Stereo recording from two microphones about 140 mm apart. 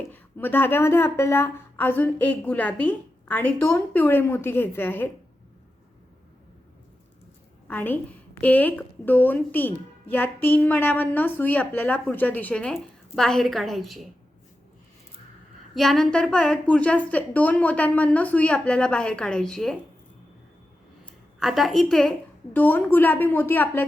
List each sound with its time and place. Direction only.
0.1 s a woman's voice: 15° left (ahead or behind)
7.7 s a woman's voice: 15° left (ahead or behind)
15.7 s a woman's voice: centre (ahead or behind)
21.3 s a woman's voice: centre (ahead or behind)